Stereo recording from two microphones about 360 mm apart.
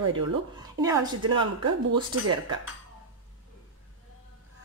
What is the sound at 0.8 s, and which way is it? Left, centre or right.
Speech, centre.